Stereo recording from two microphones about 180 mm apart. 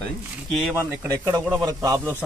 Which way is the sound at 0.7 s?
15° right (ahead or behind).